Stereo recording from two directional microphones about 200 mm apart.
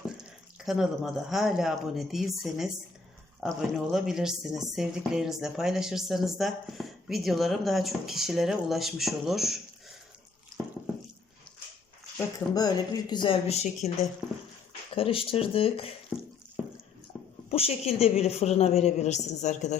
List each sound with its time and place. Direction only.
0.6 s speech: centre (ahead or behind)
12.1 s speech: 20° left (ahead or behind)
14.9 s speech: 30° left (ahead or behind)
17.5 s a woman's voice: 30° left (ahead or behind)